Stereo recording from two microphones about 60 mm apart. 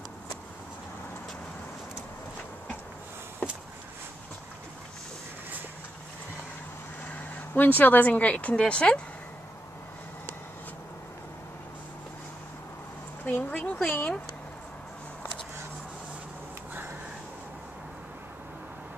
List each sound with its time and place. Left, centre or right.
3.4 s a sound: left
7.1 s speech: left
13.2 s speech: left